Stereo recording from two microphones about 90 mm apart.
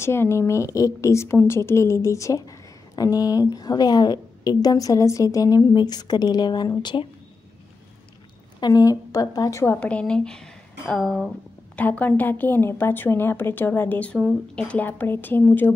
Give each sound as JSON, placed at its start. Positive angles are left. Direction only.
{"t": 0.0, "sound": "a woman's voice", "side_deg": 30}
{"t": 8.5, "sound": "a woman's voice", "side_deg": 45}
{"t": 9.8, "sound": "speech", "side_deg": 15}
{"t": 11.7, "sound": "a woman's voice", "side_deg": 15}